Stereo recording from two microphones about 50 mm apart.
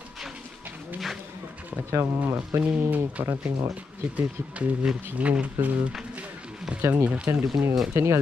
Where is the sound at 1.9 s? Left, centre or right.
Right.